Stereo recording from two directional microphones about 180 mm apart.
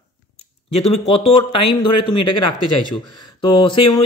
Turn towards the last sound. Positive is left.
turn(degrees=30)  # may be behind; listen again after turning